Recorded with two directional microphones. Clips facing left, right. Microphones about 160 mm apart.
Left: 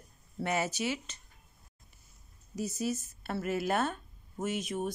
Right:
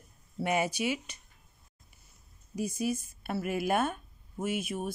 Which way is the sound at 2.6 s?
10° right (ahead or behind).